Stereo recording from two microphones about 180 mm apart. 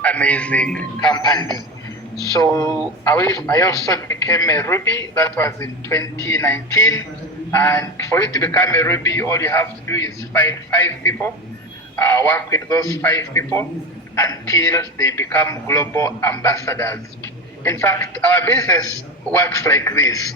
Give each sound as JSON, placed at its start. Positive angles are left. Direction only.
{"t": 0.0, "sound": "a man's voice", "side_deg": 5}
{"t": 1.1, "sound": "a man's voice", "side_deg": 25}